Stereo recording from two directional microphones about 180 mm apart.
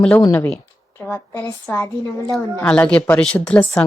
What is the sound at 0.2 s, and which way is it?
Speech, 15° left (ahead or behind).